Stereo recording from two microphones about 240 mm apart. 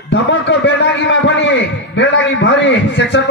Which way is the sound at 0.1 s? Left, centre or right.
Left.